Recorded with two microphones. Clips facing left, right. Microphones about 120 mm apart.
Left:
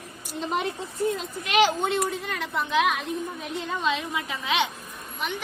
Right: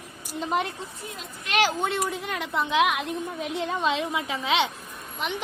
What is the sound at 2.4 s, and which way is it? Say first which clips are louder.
A woman's voice: right 1 dB; 15° right (ahead or behind).